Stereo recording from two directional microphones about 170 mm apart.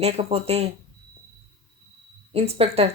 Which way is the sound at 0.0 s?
35° right (ahead or behind).